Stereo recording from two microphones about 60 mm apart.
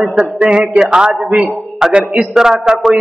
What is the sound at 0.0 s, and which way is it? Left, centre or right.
A man's voice, centre.